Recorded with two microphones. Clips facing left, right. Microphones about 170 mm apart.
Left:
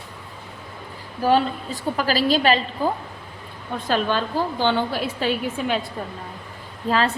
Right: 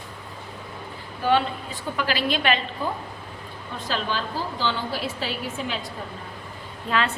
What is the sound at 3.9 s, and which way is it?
A woman's voice, 50° left (ahead or behind).